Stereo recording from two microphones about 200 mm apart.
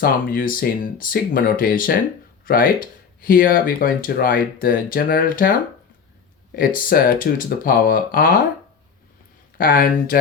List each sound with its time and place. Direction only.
0.0 s speech: 45° left (ahead or behind)
6.6 s speech: 45° left (ahead or behind)
9.6 s speech: 45° left (ahead or behind)